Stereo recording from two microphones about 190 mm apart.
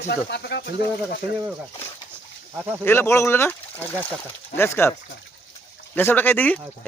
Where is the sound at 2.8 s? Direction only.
10° left (ahead or behind).